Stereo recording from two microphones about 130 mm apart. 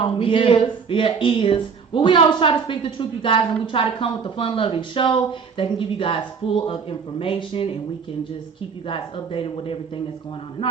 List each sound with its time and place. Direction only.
0.0 s speech: 40° left (ahead or behind)
8.9 s speech: 45° left (ahead or behind)